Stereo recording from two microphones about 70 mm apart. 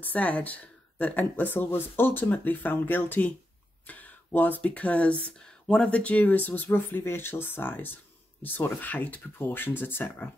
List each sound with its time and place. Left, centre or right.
0.0 s speech: left